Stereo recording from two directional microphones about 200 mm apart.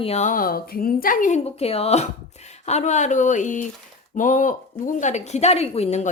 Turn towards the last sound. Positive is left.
turn(degrees=35)  # may be behind; listen again after turning